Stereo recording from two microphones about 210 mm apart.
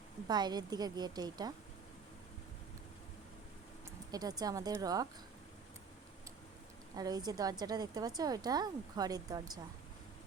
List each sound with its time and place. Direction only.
0.3 s speech: 20° right (ahead or behind)
4.1 s speech: 20° right (ahead or behind)
6.9 s speech: 20° right (ahead or behind)